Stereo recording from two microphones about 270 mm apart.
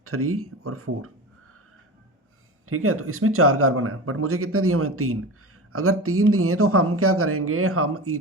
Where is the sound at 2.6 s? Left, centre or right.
Right.